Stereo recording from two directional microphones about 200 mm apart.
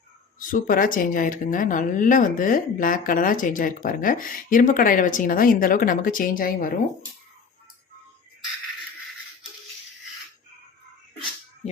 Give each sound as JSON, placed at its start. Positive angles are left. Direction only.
{"t": 0.3, "sound": "speech", "side_deg": 45}